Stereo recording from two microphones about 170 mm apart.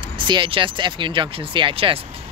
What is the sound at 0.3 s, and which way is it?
Speech, 30° right (ahead or behind).